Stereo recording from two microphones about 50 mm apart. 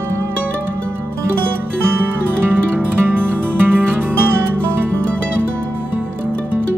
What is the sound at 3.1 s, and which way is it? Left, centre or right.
Music, right.